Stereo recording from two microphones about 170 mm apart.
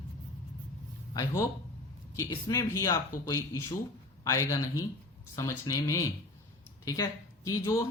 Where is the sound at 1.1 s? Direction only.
15° left (ahead or behind).